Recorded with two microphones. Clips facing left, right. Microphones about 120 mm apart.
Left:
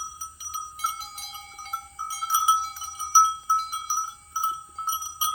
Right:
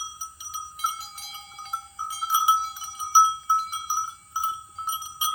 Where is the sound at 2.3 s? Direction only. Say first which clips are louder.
Right 1 dB; 20° right (ahead or behind).